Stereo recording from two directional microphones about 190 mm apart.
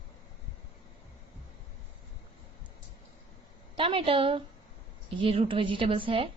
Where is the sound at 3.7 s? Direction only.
25° right (ahead or behind).